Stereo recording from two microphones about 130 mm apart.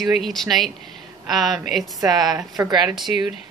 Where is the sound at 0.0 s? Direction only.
Centre (ahead or behind).